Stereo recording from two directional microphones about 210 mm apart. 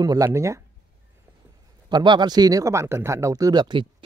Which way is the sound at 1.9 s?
20° right (ahead or behind).